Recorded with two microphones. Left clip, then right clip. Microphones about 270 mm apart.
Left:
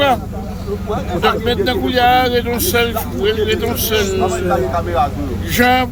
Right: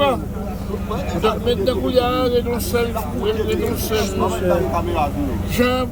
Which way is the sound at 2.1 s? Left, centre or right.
Right.